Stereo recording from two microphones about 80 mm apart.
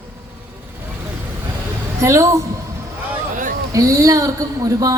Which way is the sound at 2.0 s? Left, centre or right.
Right.